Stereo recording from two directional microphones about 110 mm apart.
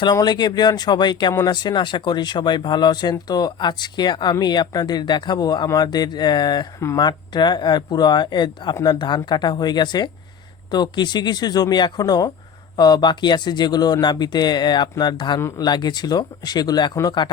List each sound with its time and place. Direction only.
0.0 s speech: 40° left (ahead or behind)
15.4 s speech: 25° left (ahead or behind)
15.6 s speech: 40° left (ahead or behind)